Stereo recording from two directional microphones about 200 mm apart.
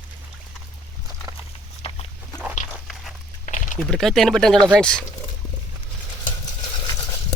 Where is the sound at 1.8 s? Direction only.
25° left (ahead or behind).